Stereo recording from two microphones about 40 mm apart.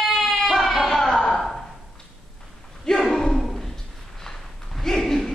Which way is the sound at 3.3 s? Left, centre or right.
Centre.